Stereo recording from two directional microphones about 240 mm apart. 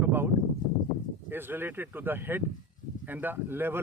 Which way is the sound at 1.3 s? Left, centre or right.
Centre.